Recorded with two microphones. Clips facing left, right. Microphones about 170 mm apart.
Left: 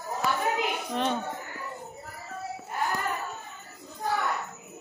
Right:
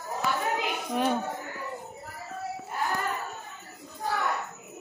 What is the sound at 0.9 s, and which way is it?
Speech, 10° right (ahead or behind).